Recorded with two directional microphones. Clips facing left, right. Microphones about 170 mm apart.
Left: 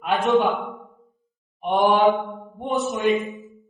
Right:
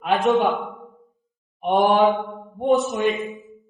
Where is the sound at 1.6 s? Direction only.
50° right (ahead or behind).